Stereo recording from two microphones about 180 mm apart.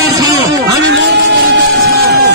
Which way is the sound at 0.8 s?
65° right (ahead or behind).